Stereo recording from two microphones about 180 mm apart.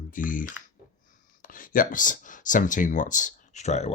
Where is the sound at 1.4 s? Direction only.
50° left (ahead or behind).